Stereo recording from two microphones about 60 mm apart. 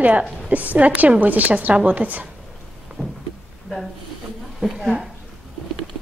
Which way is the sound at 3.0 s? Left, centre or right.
Left.